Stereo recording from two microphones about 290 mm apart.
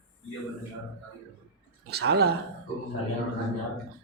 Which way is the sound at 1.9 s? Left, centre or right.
Right.